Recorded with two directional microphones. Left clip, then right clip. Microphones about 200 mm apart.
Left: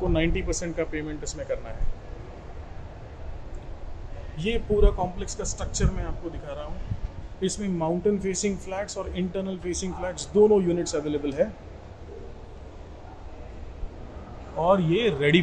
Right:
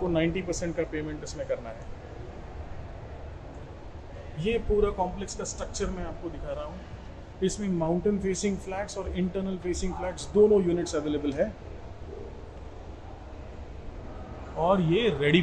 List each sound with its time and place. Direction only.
0.1 s speech: 40° left (ahead or behind)
4.4 s a man's voice: 45° left (ahead or behind)
5.2 s speech: 30° left (ahead or behind)
14.6 s a man's voice: 25° left (ahead or behind)